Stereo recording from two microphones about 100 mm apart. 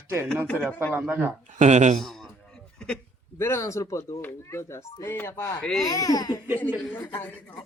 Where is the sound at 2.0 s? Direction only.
5° left (ahead or behind).